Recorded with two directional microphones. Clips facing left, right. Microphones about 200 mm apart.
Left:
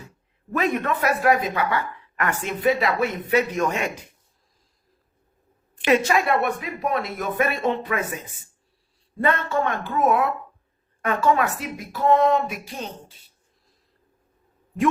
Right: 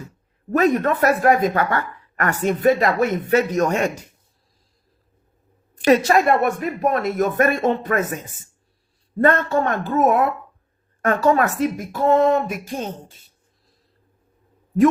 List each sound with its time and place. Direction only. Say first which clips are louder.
0.5 s speech: right 6 dB; 40° right (ahead or behind)
5.7 s speech: right 4 dB; 40° right (ahead or behind)